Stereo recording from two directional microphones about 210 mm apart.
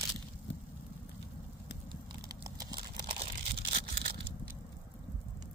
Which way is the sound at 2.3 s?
20° right (ahead or behind).